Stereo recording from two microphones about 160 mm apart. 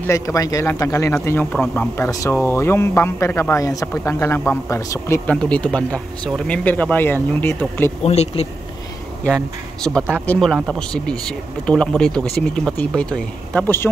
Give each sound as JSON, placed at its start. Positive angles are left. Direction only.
{"t": 0.0, "sound": "speech", "side_deg": 20}
{"t": 5.3, "sound": "speech", "side_deg": 5}
{"t": 8.0, "sound": "speech", "side_deg": 40}
{"t": 9.2, "sound": "speech", "side_deg": 5}